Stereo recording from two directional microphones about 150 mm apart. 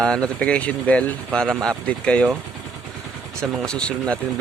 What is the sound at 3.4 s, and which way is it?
Speech, 5° left (ahead or behind).